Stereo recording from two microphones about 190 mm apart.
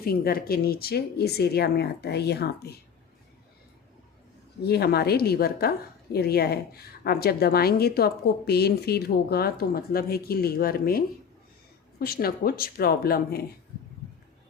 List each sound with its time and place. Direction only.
0.0 s a woman's voice: 55° left (ahead or behind)
4.6 s a woman's voice: 55° left (ahead or behind)